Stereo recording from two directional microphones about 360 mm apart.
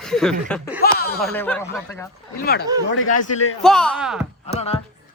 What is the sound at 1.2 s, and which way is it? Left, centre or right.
Speech, centre.